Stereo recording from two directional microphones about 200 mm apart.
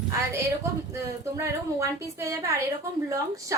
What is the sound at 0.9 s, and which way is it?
A woman's voice, 15° right (ahead or behind).